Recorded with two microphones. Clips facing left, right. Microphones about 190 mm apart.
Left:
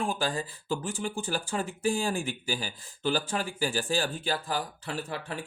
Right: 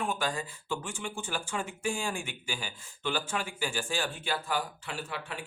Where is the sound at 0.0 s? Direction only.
30° left (ahead or behind).